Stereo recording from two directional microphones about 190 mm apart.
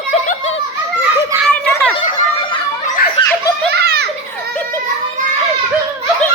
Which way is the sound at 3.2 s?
30° left (ahead or behind).